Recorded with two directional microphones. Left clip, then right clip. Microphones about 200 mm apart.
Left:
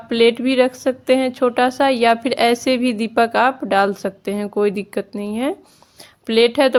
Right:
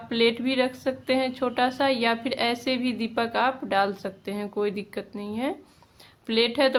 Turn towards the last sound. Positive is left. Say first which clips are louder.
# left 8 dB
turn(degrees=40)  # may be behind; listen again after turning